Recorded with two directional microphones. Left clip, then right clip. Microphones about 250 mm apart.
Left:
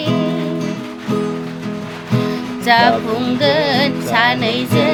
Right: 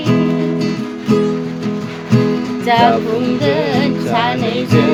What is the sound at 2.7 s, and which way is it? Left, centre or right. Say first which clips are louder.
Music: even; left.